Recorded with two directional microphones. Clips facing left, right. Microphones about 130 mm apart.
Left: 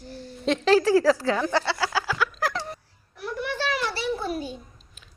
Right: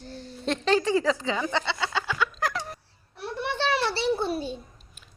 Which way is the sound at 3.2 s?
25° right (ahead or behind).